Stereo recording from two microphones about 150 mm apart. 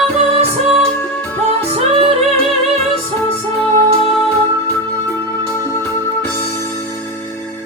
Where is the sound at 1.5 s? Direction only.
40° right (ahead or behind).